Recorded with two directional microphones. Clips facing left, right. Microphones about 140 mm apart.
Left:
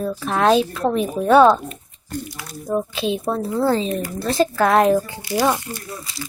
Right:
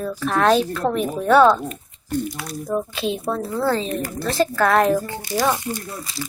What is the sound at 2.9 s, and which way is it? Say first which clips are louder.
Speech: left 2 dB; 20° left (ahead or behind).